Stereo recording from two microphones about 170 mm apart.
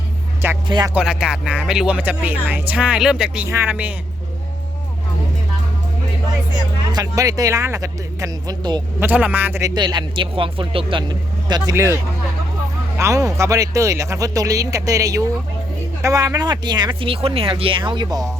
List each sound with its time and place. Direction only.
0.4 s speech: 15° right (ahead or behind)
6.9 s a man's voice: 20° right (ahead or behind)
9.0 s a man's voice: 10° right (ahead or behind)
13.0 s a man's voice: 20° right (ahead or behind)